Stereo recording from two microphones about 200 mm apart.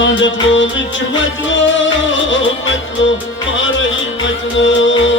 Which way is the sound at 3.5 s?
70° left (ahead or behind).